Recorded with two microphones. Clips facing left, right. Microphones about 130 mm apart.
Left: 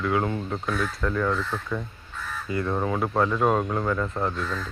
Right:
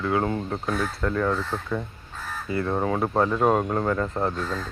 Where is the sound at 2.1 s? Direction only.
30° right (ahead or behind).